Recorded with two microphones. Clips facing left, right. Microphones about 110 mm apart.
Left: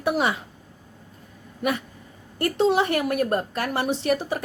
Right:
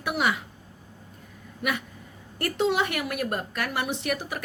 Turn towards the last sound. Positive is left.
turn(degrees=30)  # may be behind; listen again after turning